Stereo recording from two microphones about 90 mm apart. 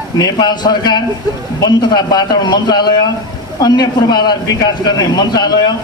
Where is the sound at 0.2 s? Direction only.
50° left (ahead or behind).